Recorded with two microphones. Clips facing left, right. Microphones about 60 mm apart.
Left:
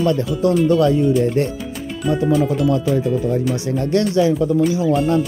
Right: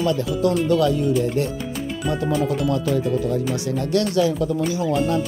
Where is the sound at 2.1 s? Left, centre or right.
Centre.